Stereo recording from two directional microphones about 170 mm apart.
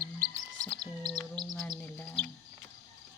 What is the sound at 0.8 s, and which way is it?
Bird, 25° right (ahead or behind).